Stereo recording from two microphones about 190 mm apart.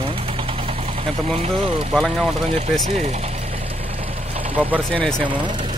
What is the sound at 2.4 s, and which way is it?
Speech, 30° right (ahead or behind).